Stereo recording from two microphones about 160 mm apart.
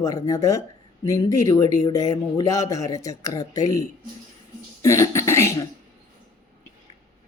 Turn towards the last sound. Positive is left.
turn(degrees=15)  # may be behind; listen again after turning